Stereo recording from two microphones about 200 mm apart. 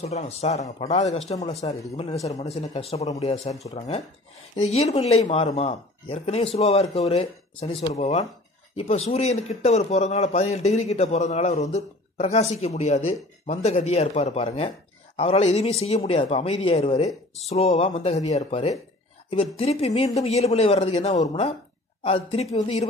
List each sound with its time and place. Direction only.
0.0 s a man's voice: 35° left (ahead or behind)